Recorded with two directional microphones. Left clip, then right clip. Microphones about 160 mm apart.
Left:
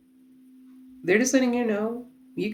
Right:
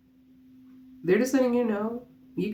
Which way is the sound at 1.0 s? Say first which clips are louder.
Left 2 dB; 30° left (ahead or behind).